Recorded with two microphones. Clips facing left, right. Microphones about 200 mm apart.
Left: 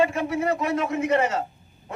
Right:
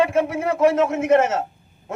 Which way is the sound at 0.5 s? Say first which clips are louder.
Right 8 dB; 85° right.